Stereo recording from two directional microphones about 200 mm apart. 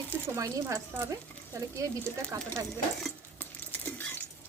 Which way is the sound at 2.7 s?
5° left (ahead or behind).